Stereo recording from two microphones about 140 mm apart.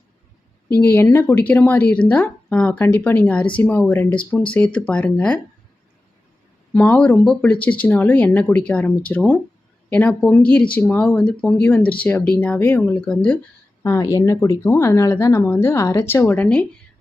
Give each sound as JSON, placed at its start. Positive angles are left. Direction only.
{"t": 0.8, "sound": "speech", "side_deg": 15}
{"t": 6.7, "sound": "speech", "side_deg": 10}
{"t": 13.8, "sound": "speech", "side_deg": 25}
{"t": 16.2, "sound": "speech", "side_deg": 10}